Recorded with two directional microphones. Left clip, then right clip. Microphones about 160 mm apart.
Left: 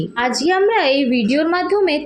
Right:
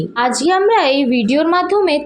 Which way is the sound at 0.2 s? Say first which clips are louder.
Right 2 dB; 25° right (ahead or behind).